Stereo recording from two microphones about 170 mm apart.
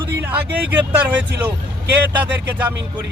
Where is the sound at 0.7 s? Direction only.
10° right (ahead or behind).